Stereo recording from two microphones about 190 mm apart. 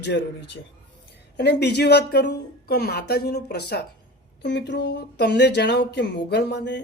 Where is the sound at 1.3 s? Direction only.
60° left (ahead or behind).